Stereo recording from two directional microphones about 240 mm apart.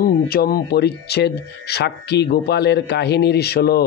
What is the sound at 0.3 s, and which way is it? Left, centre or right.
Speech, left.